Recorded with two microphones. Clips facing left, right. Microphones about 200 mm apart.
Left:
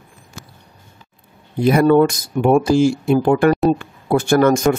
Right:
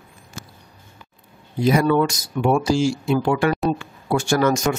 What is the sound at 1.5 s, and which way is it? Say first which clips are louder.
Speech: left 5 dB; 55° left (ahead or behind).